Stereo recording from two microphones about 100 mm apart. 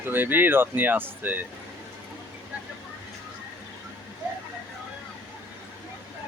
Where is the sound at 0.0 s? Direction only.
20° right (ahead or behind).